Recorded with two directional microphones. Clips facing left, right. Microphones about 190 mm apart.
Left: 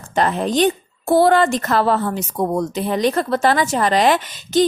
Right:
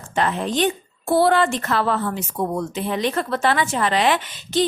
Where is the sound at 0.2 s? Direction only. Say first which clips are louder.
Left 4 dB; 40° left (ahead or behind).